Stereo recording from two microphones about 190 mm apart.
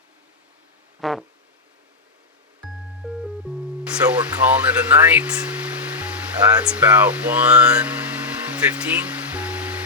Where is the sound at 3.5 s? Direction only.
5° right (ahead or behind).